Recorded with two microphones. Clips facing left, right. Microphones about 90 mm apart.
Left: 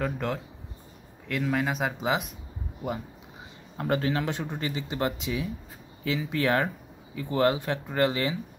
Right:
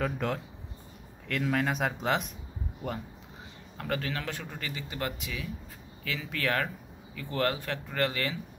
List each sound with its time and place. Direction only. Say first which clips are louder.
0.0 s speech: left 1 dB; centre (ahead or behind)
3.7 s speech: left 7 dB; 25° left (ahead or behind)